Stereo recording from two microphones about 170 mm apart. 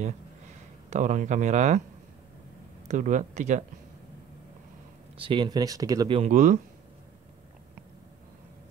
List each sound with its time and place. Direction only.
0.8 s speech: 45° right (ahead or behind)
2.9 s speech: 45° right (ahead or behind)
5.1 s speech: 30° right (ahead or behind)
6.1 s speech: 45° right (ahead or behind)